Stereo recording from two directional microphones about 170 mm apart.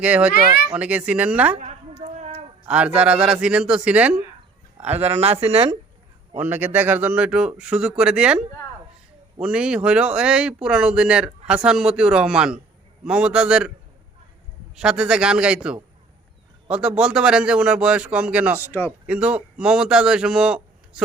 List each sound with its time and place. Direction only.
0.0 s a man's voice: 5° right (ahead or behind)
1.5 s a sound: 40° right (ahead or behind)
2.6 s a man's voice: 5° right (ahead or behind)
5.5 s speech: 35° right (ahead or behind)
6.3 s a man's voice: 10° right (ahead or behind)
14.8 s a man's voice: 5° right (ahead or behind)
18.7 s speech: 15° left (ahead or behind)
19.0 s a man's voice: 5° right (ahead or behind)